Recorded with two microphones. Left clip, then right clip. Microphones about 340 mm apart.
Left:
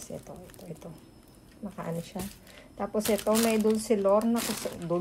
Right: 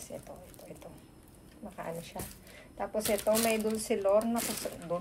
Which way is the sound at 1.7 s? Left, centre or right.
Left.